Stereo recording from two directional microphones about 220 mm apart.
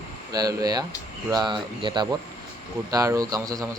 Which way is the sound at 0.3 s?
15° right (ahead or behind).